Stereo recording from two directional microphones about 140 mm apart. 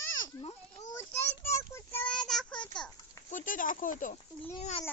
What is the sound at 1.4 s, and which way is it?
Speech, 20° left (ahead or behind).